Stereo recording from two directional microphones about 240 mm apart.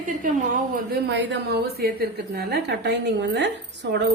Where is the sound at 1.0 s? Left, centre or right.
Right.